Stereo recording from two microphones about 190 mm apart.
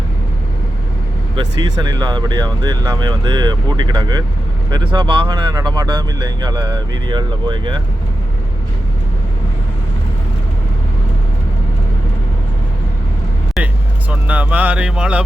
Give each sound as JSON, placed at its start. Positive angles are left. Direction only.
{"t": 1.4, "sound": "speech", "side_deg": -20}
{"t": 13.6, "sound": "vehicle", "side_deg": 0}
{"t": 14.1, "sound": "speech", "side_deg": -10}